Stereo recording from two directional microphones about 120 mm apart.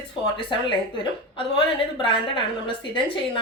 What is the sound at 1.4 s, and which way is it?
A woman's voice, 45° left (ahead or behind).